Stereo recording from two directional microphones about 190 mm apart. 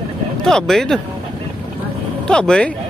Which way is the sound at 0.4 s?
Centre (ahead or behind).